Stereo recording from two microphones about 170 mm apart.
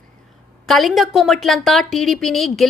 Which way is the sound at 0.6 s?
Centre (ahead or behind).